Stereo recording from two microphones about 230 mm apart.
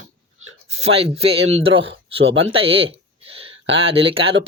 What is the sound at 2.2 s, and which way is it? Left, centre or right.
Speech, right.